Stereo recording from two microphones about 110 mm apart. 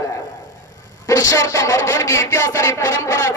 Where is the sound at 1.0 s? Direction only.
30° left (ahead or behind).